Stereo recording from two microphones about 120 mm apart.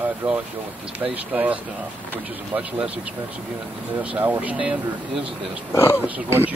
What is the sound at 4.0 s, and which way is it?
Speech, 15° right (ahead or behind).